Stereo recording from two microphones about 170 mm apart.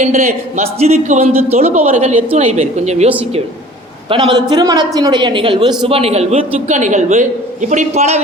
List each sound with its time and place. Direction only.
0.0 s a man's voice: 40° right (ahead or behind)
4.1 s a woman's voice: 25° right (ahead or behind)